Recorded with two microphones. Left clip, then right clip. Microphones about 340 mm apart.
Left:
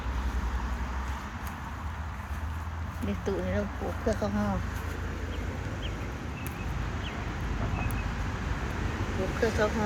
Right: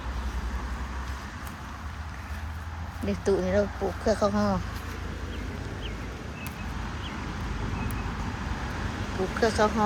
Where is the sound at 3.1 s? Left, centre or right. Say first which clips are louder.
Right 7 dB; centre.